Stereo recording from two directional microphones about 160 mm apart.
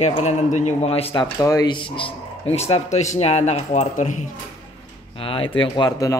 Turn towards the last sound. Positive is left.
turn(degrees=25)  # may be behind; listen again after turning